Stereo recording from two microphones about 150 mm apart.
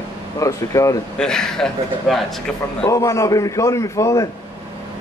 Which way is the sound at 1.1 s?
5° left (ahead or behind).